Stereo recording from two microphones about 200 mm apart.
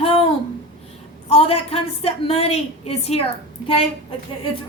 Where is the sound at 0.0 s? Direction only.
30° left (ahead or behind).